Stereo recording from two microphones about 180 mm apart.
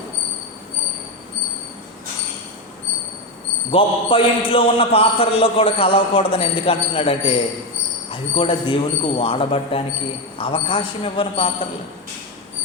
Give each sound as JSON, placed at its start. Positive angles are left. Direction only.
{"t": 3.7, "sound": "a man's voice", "side_deg": 30}